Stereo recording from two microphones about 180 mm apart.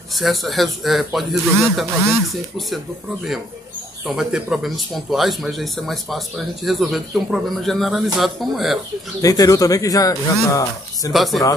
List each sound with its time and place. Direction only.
0.1 s a man's voice: centre (ahead or behind)
4.0 s a man's voice: 5° right (ahead or behind)
9.2 s speech: 20° left (ahead or behind)
11.1 s a man's voice: centre (ahead or behind)